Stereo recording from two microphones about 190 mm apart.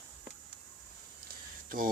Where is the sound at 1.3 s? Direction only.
45° right (ahead or behind).